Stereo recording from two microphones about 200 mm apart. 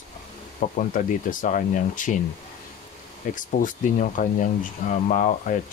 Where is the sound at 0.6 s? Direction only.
40° left (ahead or behind).